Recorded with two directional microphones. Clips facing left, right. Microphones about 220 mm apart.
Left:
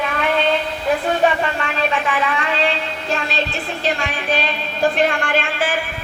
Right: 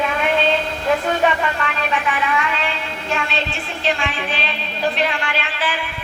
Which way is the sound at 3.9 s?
45° left (ahead or behind).